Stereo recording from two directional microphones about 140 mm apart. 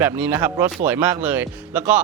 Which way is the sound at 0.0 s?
15° right (ahead or behind).